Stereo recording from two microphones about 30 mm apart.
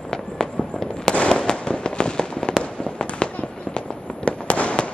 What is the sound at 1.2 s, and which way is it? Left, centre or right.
Fireworks, left.